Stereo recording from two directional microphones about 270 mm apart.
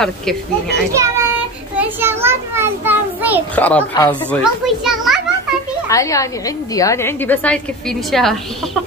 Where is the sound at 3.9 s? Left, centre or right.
Centre.